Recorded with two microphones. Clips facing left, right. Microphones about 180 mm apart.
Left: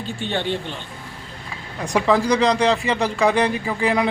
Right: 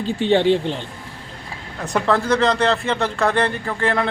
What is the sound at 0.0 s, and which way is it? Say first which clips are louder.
Speech: right 9 dB; 90° right.